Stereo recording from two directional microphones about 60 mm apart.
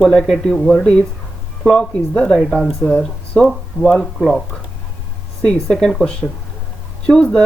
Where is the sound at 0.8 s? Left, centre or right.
Centre.